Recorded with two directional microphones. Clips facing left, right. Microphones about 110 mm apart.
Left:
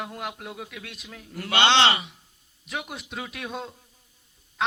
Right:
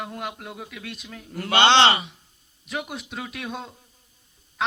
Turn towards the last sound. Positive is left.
turn(degrees=0)  # may be behind; listen again after turning